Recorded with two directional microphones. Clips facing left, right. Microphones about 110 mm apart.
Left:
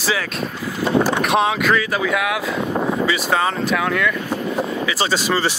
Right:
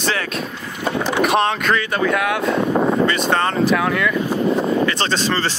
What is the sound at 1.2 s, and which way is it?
Speech, centre (ahead or behind).